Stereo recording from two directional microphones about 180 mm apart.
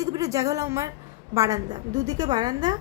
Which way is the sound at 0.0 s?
20° right (ahead or behind).